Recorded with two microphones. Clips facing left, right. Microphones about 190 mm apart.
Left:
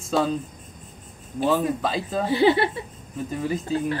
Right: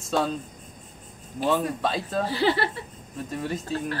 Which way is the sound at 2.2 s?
20° left (ahead or behind).